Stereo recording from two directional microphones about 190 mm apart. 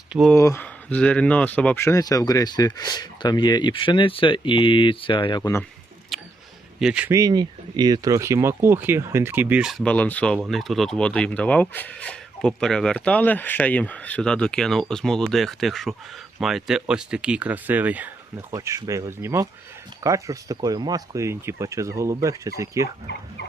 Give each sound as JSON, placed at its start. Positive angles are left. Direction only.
{"t": 0.1, "sound": "speech", "side_deg": 0}
{"t": 0.3, "sound": "speech", "side_deg": 15}
{"t": 5.4, "sound": "speech", "side_deg": 15}
{"t": 6.1, "sound": "a sound", "side_deg": 0}
{"t": 6.7, "sound": "speech", "side_deg": -5}
{"t": 7.2, "sound": "speech", "side_deg": -20}